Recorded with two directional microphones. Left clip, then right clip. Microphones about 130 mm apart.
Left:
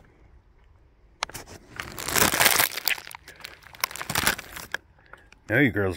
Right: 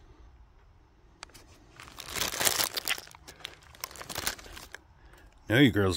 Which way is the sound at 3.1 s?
40° left (ahead or behind).